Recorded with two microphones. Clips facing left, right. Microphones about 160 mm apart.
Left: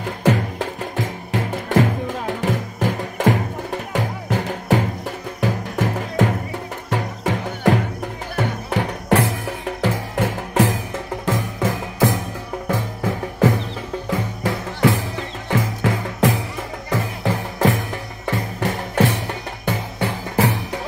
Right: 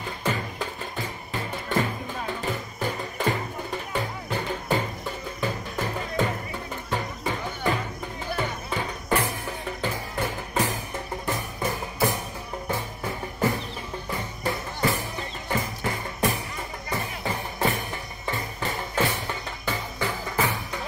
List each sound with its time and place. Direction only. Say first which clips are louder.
0.0 s music: left 9 dB; 80° left
18.2 s music: left 8 dB; 75° left (ahead or behind)